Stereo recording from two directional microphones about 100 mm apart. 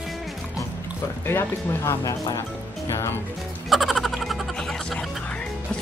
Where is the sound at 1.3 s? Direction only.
25° left (ahead or behind).